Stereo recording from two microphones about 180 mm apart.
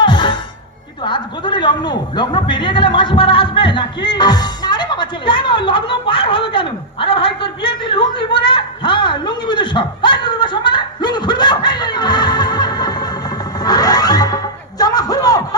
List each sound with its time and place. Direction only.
0.0 s music: 25° left (ahead or behind)
1.0 s a sound: 25° left (ahead or behind)
13.6 s music: 20° left (ahead or behind)